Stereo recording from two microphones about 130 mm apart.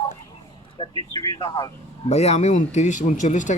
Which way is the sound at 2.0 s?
55° left (ahead or behind).